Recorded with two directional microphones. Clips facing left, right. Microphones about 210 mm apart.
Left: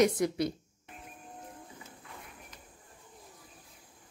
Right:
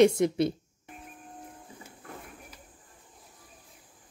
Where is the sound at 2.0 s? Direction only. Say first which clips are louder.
Right 8 dB; 50° right (ahead or behind).